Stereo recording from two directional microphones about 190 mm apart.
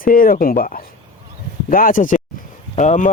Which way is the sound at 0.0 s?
45° left (ahead or behind).